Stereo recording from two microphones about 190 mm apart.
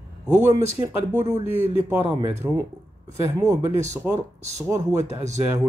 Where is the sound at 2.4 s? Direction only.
5° right (ahead or behind).